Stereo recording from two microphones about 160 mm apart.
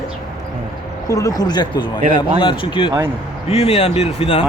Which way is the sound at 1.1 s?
20° left (ahead or behind).